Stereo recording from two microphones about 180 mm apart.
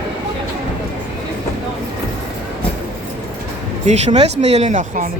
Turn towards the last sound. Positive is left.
turn(degrees=-45)  # may be behind; listen again after turning